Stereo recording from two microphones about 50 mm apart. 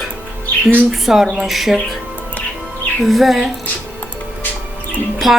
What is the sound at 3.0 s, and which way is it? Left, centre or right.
Speech, centre.